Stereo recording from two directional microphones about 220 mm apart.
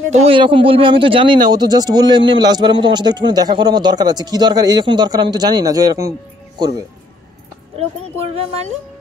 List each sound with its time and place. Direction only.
0.1 s a man's voice: 25° right (ahead or behind)